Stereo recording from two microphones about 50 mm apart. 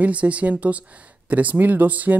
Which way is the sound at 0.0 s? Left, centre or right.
Right.